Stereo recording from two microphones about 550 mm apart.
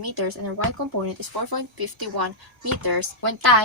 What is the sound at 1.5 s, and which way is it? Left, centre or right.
A woman's voice, right.